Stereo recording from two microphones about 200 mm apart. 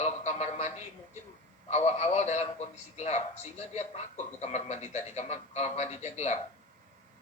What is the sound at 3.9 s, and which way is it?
Speech, 30° left (ahead or behind).